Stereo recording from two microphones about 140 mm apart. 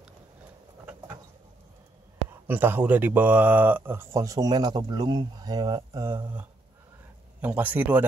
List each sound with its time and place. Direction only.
2.4 s speech: 15° right (ahead or behind)
7.4 s speech: 10° right (ahead or behind)